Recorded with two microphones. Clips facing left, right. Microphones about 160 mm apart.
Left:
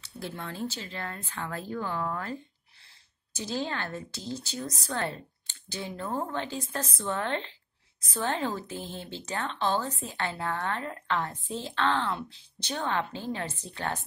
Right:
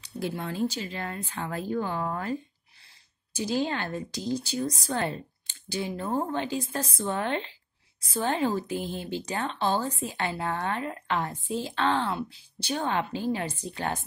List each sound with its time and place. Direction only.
0.0 s a woman's voice: 15° right (ahead or behind)
3.3 s a woman's voice: 15° right (ahead or behind)